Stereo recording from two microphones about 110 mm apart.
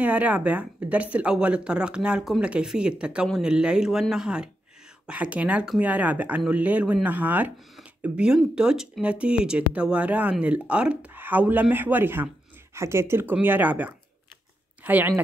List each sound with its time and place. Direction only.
0.0 s speech: 15° right (ahead or behind)